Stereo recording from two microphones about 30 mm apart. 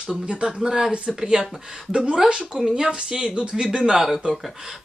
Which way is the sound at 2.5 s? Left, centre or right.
Centre.